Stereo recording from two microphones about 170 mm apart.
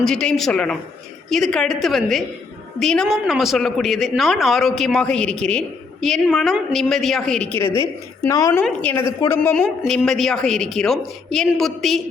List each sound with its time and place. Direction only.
0.0 s a woman's voice: 5° left (ahead or behind)
8.2 s a woman's voice: 20° left (ahead or behind); by 12.0 s centre (ahead or behind)